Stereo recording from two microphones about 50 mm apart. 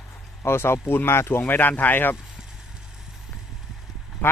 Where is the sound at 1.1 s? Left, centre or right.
Left.